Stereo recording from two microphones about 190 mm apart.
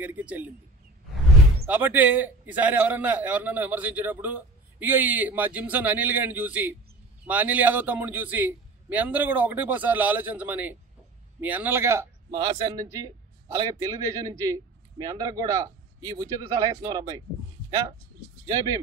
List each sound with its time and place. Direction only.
0.0 s a man's voice: 10° right (ahead or behind)
1.7 s a man's voice: 10° right (ahead or behind)